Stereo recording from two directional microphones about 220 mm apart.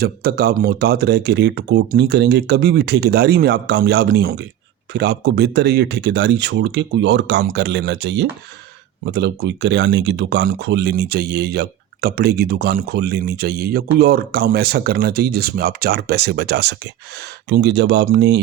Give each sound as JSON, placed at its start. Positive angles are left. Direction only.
{"t": 0.0, "sound": "speech", "side_deg": -45}